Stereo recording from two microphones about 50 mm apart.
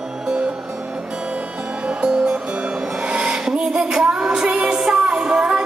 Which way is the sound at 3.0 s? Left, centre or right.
Centre.